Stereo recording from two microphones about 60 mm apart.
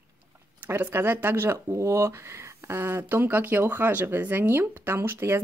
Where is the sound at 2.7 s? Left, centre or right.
Right.